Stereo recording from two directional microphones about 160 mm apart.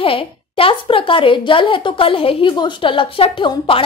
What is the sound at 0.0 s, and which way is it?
A woman's voice, 35° left (ahead or behind).